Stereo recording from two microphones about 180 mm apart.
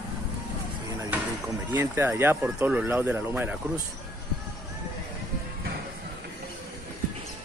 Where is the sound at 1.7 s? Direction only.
15° right (ahead or behind).